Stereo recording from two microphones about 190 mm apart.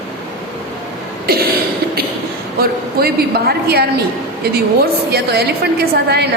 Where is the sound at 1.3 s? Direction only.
55° right (ahead or behind).